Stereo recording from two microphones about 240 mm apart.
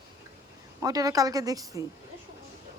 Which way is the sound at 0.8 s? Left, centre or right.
Centre.